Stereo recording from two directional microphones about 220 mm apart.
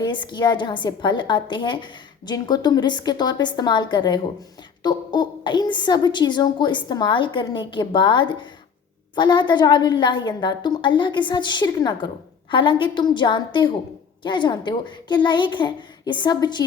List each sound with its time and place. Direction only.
0.0 s a woman's voice: 20° left (ahead or behind)